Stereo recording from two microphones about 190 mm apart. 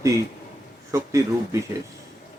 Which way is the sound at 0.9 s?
15° right (ahead or behind).